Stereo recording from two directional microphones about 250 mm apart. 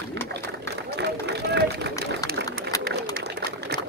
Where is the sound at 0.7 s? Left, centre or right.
Right.